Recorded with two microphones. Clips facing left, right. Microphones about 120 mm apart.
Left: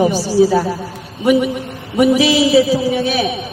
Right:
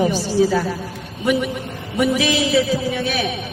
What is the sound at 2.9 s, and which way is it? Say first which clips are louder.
Speech: left 5 dB; 25° left (ahead or behind).